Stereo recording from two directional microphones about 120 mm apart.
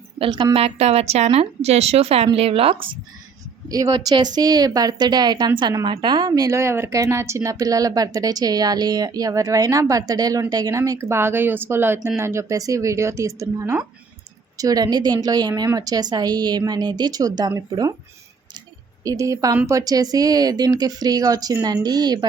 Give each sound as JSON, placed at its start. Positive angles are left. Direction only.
{"t": 0.2, "sound": "a woman's voice", "side_deg": -45}
{"t": 0.5, "sound": "a woman's voice", "side_deg": -60}
{"t": 3.7, "sound": "a woman's voice", "side_deg": -30}
{"t": 19.0, "sound": "a woman's voice", "side_deg": -25}